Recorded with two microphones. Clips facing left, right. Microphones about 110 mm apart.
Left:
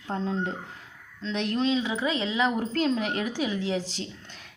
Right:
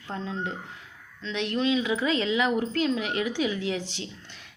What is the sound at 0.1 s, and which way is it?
A woman's voice, 35° left (ahead or behind).